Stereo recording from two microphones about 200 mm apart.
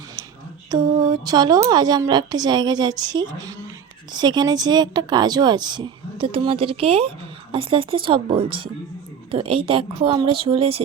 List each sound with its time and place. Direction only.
0.7 s speech: 20° right (ahead or behind)